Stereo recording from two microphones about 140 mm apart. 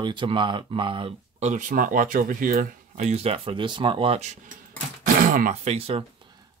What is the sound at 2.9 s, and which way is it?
Speech, 50° right (ahead or behind).